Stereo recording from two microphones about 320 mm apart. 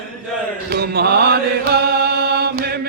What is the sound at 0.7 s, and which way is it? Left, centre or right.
Mantra, right.